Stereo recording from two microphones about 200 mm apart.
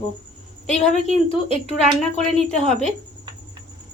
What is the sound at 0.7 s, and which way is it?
Speech, 30° left (ahead or behind).